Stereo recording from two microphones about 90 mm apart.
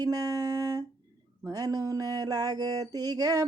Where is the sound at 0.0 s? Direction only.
45° right (ahead or behind).